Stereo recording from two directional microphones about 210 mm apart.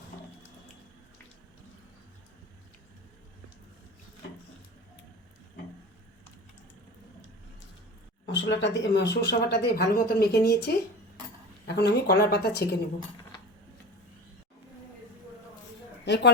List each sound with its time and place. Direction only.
8.3 s speech: 60° left (ahead or behind)
16.0 s speech: 55° left (ahead or behind)